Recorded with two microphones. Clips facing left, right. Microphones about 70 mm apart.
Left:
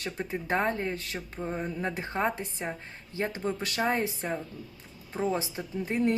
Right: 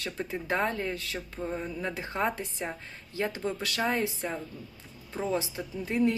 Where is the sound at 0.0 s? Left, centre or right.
Left.